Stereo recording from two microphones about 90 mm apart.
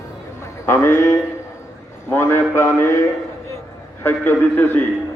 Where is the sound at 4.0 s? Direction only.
25° left (ahead or behind).